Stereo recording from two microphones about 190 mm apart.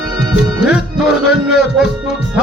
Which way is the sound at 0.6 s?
5° right (ahead or behind).